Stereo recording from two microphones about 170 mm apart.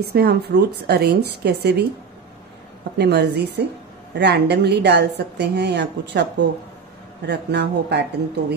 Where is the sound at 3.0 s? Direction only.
75° right (ahead or behind).